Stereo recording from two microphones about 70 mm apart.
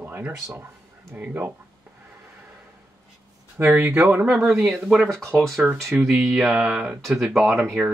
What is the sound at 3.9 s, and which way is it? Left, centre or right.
Speech, centre.